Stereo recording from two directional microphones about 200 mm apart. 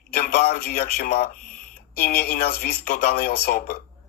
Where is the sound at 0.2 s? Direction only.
50° left (ahead or behind).